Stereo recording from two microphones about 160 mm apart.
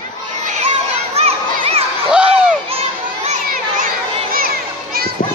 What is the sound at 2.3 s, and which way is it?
Crowd, 40° right (ahead or behind).